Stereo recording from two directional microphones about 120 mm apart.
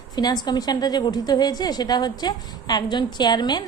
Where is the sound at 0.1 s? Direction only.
35° left (ahead or behind).